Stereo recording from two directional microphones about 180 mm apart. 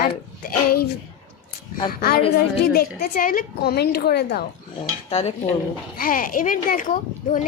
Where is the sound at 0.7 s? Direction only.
60° left (ahead or behind).